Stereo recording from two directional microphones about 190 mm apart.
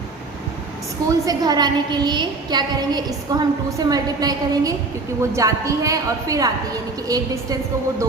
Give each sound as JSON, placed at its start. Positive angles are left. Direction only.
{"t": 1.2, "sound": "a woman's voice", "side_deg": -20}